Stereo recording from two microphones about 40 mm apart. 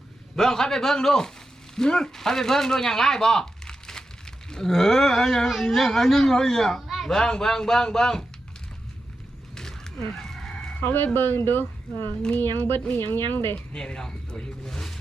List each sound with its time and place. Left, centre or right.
0.3 s speech: centre
6.7 s a sound: centre
7.1 s speech: centre
9.6 s a sound: centre
10.8 s a woman's voice: left
13.7 s speech: centre